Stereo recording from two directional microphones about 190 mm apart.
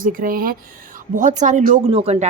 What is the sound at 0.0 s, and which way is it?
A woman's voice, 45° right (ahead or behind).